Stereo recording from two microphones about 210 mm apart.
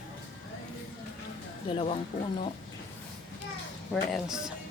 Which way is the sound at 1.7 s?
25° left (ahead or behind).